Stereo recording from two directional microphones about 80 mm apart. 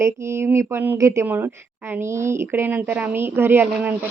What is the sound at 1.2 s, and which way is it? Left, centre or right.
A woman's voice, right.